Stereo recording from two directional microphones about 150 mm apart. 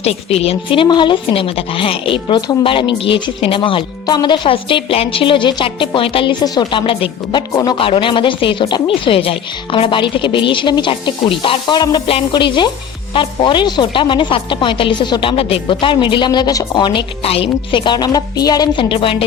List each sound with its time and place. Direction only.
0.0 s speech: 45° left (ahead or behind)